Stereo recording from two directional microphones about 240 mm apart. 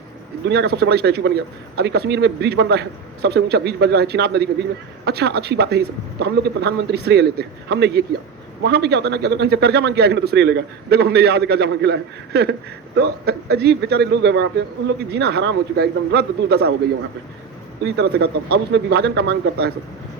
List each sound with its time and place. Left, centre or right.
0.4 s a man's voice: right
17.8 s a man's voice: right